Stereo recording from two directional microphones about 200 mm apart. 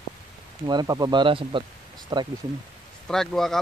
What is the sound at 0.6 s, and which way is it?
Speech, 20° right (ahead or behind).